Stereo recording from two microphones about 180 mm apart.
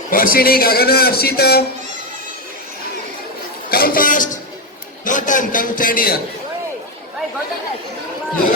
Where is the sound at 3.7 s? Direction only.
55° left (ahead or behind).